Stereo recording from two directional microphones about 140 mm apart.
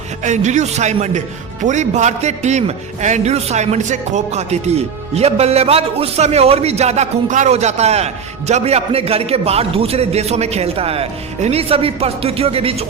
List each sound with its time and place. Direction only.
0.2 s a man's voice: 60° right (ahead or behind)